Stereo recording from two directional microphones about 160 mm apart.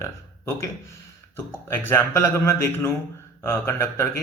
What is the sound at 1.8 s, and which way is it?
A man's voice, 15° left (ahead or behind).